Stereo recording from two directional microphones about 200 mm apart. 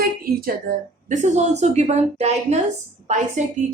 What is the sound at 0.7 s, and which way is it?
Speech, 55° right (ahead or behind).